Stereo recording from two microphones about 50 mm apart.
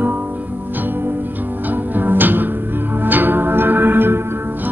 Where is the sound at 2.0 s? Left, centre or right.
Right.